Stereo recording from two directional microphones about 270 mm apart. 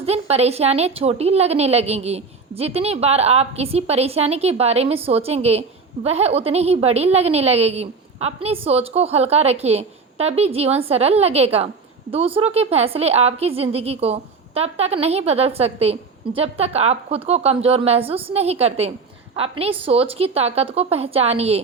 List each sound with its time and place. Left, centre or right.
0.0 s a woman's voice: right